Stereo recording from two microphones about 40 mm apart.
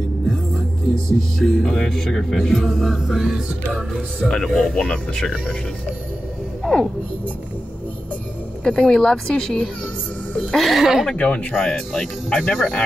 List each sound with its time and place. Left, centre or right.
1.4 s speech: centre
2.7 s music: centre
3.3 s speech: centre
4.2 s speech: left
6.6 s speech: centre
8.6 s speech: centre
10.5 s music: centre
10.8 s speech: centre
11.1 s speech: left
11.5 s speech: centre
12.3 s speech: left